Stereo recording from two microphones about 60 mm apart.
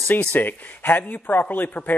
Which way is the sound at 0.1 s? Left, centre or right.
Left.